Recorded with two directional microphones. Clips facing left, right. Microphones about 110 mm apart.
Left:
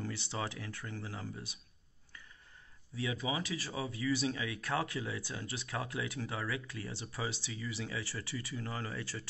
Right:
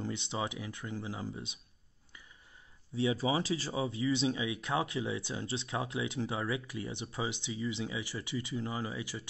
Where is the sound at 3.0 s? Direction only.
30° right (ahead or behind).